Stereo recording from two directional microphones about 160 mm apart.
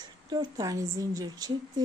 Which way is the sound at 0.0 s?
25° right (ahead or behind).